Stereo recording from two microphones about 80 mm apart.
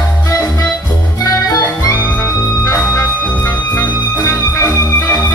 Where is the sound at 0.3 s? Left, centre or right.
Left.